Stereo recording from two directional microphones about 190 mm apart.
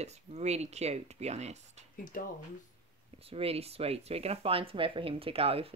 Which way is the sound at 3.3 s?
30° right (ahead or behind).